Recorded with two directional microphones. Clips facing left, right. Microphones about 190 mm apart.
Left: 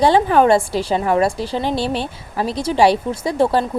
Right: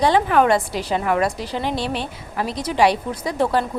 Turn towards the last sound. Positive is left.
turn(degrees=30)  # may be behind; listen again after turning